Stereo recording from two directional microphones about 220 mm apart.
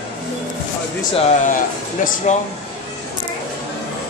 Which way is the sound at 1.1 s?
35° left (ahead or behind).